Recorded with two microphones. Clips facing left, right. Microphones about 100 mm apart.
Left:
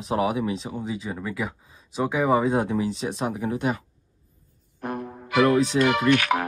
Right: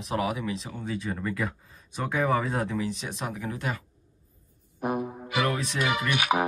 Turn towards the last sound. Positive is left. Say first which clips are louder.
# left 4 dB
turn(degrees=-15)  # may be behind; listen again after turning